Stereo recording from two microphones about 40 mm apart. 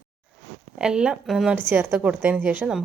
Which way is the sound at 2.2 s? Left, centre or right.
Right.